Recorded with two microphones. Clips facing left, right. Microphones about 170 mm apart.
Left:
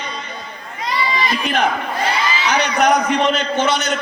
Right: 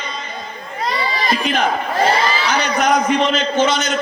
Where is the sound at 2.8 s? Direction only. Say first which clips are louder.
Even; 65° left (ahead or behind).